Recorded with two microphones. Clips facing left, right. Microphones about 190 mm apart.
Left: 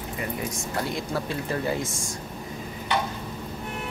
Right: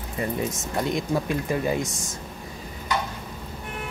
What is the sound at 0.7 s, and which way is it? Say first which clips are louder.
Speech: right 4 dB; 20° right (ahead or behind).